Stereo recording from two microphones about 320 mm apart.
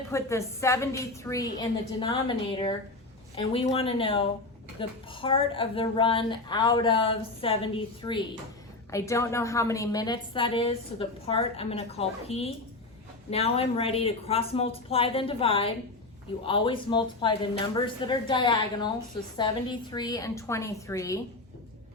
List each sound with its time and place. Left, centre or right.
0.1 s a woman's voice: centre